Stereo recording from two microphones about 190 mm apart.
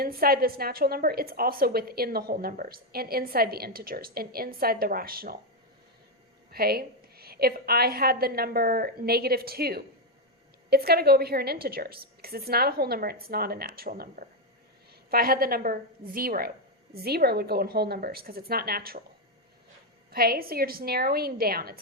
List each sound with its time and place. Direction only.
0.0 s a woman's voice: 50° right (ahead or behind)
6.5 s a woman's voice: 55° right (ahead or behind)
20.1 s a woman's voice: 50° right (ahead or behind)